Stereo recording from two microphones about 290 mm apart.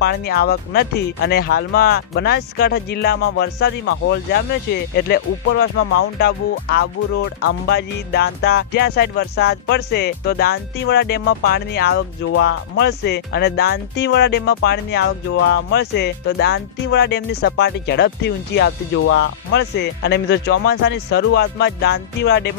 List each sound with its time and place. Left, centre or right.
0.0 s music: left